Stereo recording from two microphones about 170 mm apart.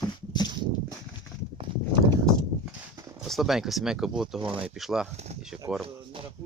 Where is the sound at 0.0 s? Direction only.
25° left (ahead or behind).